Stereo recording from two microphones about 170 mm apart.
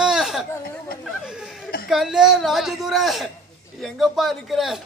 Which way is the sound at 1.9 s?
Centre (ahead or behind).